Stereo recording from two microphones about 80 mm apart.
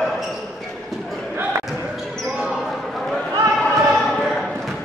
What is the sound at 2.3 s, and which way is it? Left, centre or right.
Basketball bounce, centre.